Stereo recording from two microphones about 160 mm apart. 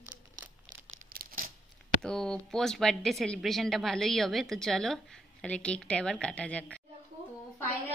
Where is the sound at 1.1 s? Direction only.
60° right (ahead or behind).